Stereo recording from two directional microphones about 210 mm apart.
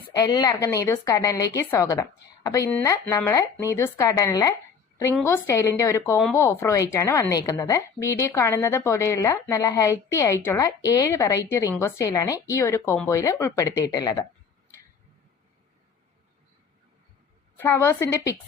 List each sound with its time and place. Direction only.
0.1 s a woman's voice: 20° left (ahead or behind)
17.6 s a woman's voice: 10° left (ahead or behind)